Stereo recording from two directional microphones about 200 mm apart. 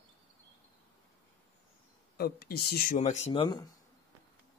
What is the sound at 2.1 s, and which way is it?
Speech, 50° left (ahead or behind).